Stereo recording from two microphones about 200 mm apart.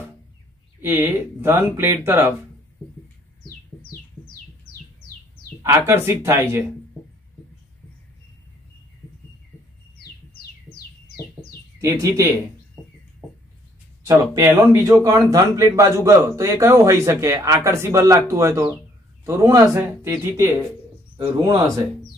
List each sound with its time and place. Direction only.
0.7 s speech: 10° right (ahead or behind)
5.6 s speech: 15° right (ahead or behind)
11.8 s speech: 15° right (ahead or behind)
14.0 s speech: 15° right (ahead or behind)